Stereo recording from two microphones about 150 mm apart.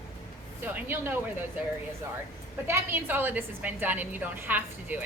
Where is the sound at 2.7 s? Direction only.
15° right (ahead or behind).